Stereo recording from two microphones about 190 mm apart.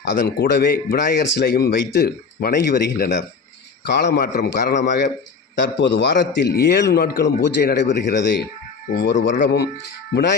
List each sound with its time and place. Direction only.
0.0 s a man's voice: 60° left (ahead or behind)